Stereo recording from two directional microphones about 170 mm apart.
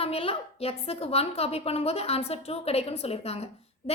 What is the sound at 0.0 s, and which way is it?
A woman's voice, 35° left (ahead or behind).